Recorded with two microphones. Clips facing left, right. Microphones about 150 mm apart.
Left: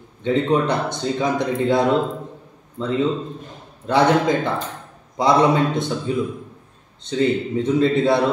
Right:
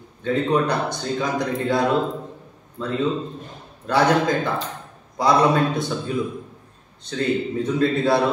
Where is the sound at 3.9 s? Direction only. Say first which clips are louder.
Left 2 dB; 20° left (ahead or behind).